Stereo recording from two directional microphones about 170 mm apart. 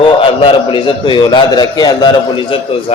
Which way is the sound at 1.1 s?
25° left (ahead or behind).